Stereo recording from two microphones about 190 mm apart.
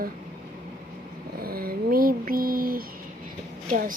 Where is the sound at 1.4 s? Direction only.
50° right (ahead or behind).